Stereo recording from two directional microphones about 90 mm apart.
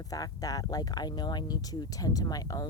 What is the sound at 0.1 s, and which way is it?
Speech, 40° left (ahead or behind).